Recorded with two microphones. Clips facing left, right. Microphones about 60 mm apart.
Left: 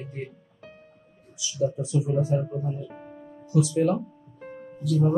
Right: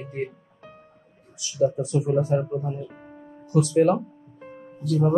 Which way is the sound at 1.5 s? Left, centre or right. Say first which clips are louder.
Right 4 dB; right.